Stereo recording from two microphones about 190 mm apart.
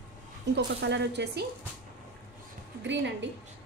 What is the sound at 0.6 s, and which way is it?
Speech, 65° right (ahead or behind).